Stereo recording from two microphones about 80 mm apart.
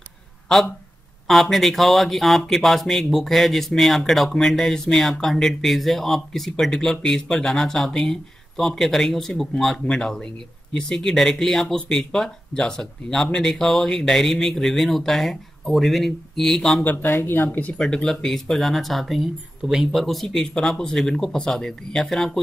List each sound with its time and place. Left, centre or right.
1.2 s speech: centre
16.8 s speech: left
17.7 s speech: centre